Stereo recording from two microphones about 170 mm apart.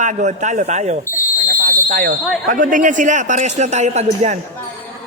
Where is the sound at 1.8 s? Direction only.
60° right (ahead or behind).